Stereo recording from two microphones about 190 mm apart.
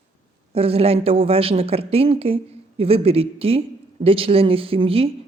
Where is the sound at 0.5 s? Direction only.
30° right (ahead or behind).